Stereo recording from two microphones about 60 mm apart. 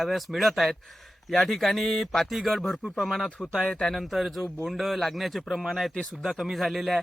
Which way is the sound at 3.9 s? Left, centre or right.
Centre.